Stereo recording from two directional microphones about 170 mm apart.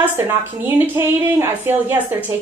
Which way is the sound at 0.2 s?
15° right (ahead or behind).